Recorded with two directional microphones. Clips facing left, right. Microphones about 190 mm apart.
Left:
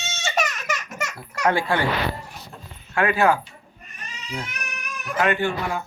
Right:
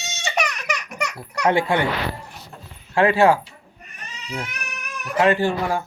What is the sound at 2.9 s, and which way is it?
Speech, 30° right (ahead or behind).